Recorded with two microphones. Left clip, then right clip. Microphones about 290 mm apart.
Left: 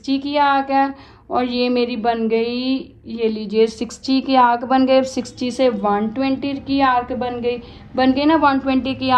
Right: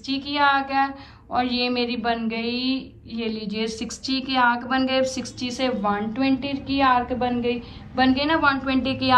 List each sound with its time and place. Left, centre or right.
0.0 s a woman's voice: left